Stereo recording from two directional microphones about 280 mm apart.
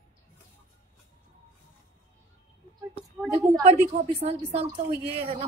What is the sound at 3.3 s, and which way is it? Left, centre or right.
A woman's voice, centre.